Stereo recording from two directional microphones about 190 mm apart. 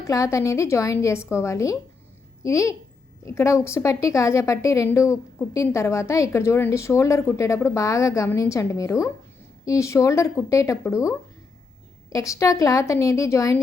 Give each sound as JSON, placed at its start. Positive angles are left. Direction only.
{"t": 0.0, "sound": "a woman's voice", "side_deg": 15}
{"t": 12.1, "sound": "a woman's voice", "side_deg": 15}